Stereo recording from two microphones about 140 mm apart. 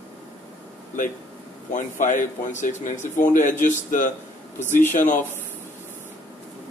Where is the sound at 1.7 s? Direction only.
65° left (ahead or behind).